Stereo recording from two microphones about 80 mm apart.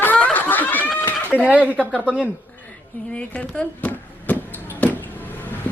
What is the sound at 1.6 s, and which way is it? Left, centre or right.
Speech, centre.